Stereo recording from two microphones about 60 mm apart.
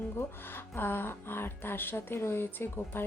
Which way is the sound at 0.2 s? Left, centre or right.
Left.